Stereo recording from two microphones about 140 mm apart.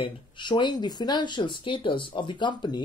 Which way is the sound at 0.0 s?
35° left (ahead or behind).